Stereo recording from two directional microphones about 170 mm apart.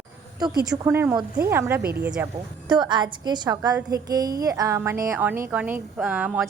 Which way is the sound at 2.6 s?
25° right (ahead or behind).